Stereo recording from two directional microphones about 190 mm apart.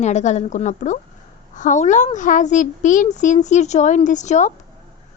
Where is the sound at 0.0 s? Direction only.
40° left (ahead or behind).